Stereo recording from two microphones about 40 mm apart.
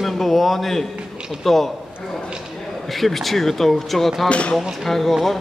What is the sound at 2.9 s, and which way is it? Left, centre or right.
A woman's voice, centre.